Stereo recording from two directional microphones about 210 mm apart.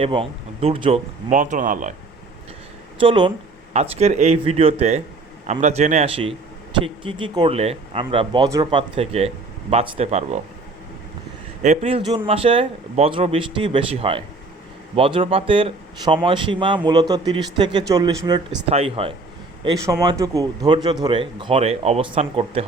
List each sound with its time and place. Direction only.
0.0 s speech: 25° right (ahead or behind)
3.0 s a man's voice: 25° right (ahead or behind)
11.6 s a man's voice: 30° right (ahead or behind)
18.7 s a man's voice: 30° right (ahead or behind)